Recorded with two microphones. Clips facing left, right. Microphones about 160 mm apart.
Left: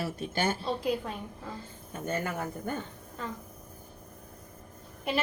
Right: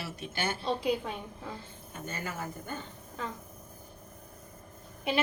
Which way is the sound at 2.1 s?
55° left (ahead or behind).